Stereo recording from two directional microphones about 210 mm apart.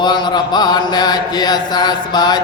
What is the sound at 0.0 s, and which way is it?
Mantra, 20° left (ahead or behind).